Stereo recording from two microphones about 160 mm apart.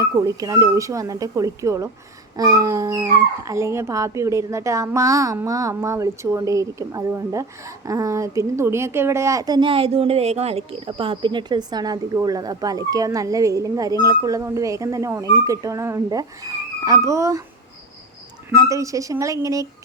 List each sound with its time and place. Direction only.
0.0 s speech: 20° right (ahead or behind)
18.5 s speech: 20° right (ahead or behind)